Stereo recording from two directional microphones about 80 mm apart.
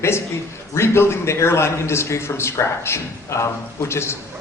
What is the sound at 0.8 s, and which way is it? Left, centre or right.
A man's voice, left.